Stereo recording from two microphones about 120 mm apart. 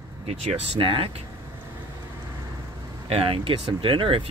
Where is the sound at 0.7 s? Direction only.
45° right (ahead or behind).